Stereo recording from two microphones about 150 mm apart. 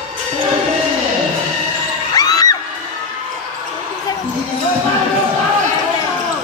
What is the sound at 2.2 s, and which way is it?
Crowd, 25° left (ahead or behind).